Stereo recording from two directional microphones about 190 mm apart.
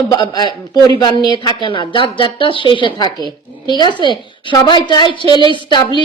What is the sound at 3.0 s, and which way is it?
Speech, 25° right (ahead or behind).